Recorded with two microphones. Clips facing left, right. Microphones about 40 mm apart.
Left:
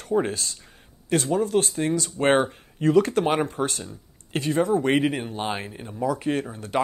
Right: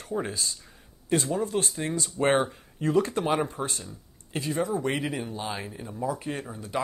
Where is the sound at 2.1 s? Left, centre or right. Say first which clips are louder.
Left 2 dB; left.